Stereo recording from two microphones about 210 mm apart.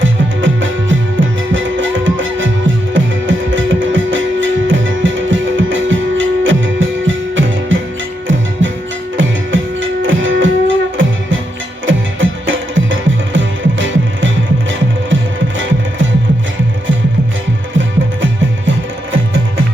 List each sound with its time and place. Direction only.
0.0 s music: 65° right (ahead or behind)
9.1 s music: 65° right (ahead or behind)